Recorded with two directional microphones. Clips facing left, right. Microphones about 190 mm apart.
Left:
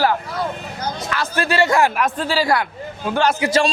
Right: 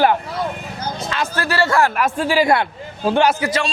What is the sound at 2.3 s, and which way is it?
Speech, 20° right (ahead or behind).